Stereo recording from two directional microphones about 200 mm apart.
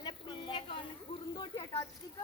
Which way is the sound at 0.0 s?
25° left (ahead or behind).